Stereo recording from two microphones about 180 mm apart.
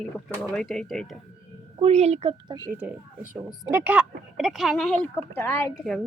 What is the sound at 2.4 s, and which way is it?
Speech, 25° right (ahead or behind).